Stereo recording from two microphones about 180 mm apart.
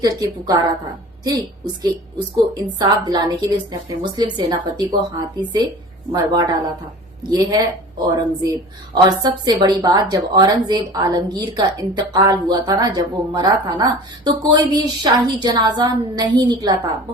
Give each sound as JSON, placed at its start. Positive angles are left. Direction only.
{"t": 0.0, "sound": "a woman's voice", "side_deg": -20}